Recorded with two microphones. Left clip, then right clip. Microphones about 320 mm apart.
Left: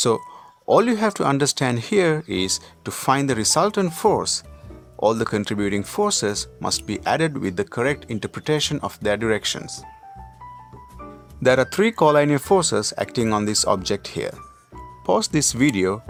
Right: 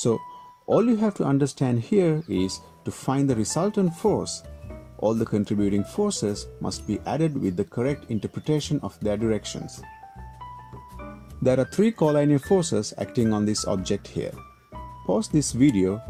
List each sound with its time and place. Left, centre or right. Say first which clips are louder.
0.7 s speech: left 5 dB; left
11.4 s speech: left 5 dB; left